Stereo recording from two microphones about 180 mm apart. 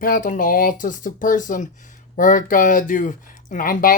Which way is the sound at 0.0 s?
50° left (ahead or behind).